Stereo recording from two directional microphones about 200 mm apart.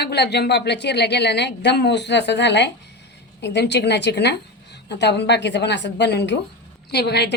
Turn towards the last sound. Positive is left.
turn(degrees=55)  # may be behind; listen again after turning